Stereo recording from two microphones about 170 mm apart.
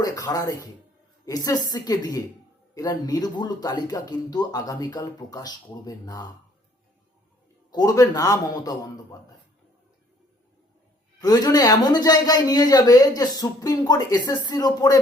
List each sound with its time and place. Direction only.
0.0 s speech: 20° left (ahead or behind)
7.7 s speech: 20° left (ahead or behind)
11.2 s speech: 25° left (ahead or behind)